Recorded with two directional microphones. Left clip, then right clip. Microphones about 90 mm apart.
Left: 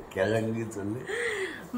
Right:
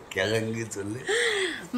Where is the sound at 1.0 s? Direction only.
35° right (ahead or behind).